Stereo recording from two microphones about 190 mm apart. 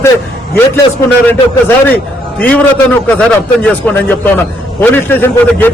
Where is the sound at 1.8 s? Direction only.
10° left (ahead or behind).